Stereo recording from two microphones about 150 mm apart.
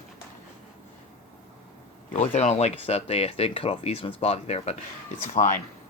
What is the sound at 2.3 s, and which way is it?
Speech, 50° left (ahead or behind).